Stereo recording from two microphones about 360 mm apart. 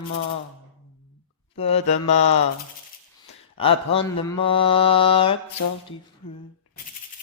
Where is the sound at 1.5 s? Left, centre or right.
Centre.